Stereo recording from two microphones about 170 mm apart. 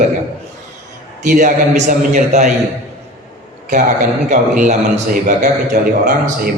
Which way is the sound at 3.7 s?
50° right (ahead or behind).